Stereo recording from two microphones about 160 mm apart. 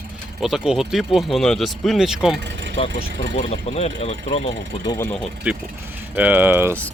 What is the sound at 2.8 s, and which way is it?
Speech, 35° left (ahead or behind).